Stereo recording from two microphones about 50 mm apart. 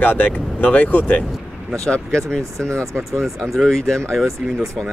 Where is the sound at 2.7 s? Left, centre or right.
Right.